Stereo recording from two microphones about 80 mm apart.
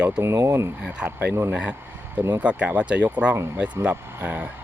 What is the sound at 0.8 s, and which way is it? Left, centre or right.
Speech, centre.